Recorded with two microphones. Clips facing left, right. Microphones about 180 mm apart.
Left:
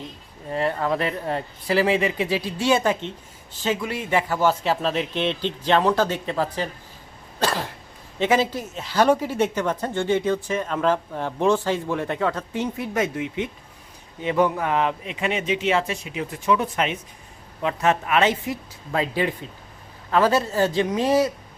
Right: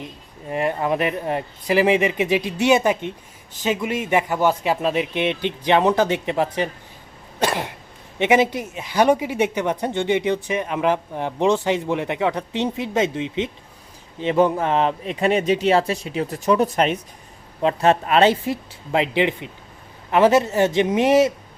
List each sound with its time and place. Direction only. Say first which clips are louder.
0.5 s a man's voice: right 2 dB; 15° right (ahead or behind)
7.3 s cough: right 2 dB; 20° right (ahead or behind)
8.2 s a man's voice: right 3 dB; 20° right (ahead or behind)